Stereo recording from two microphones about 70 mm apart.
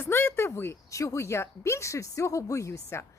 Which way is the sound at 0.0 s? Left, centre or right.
Left.